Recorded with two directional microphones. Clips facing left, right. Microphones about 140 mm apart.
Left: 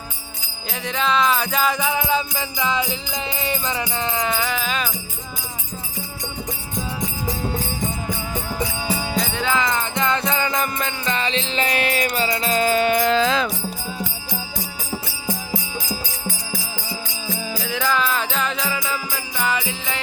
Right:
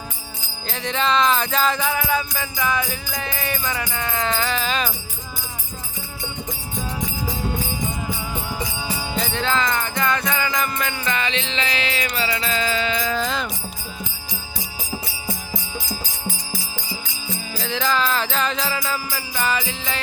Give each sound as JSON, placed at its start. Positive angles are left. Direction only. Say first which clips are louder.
{"t": 0.7, "sound": "music", "louder": "even", "side_deg": 5}
{"t": 9.2, "sound": "music", "louder": "right 2 dB", "side_deg": 10}
{"t": 17.6, "sound": "music", "louder": "right 1 dB", "side_deg": 10}